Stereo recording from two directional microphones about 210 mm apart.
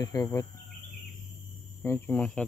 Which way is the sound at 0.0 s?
15° left (ahead or behind).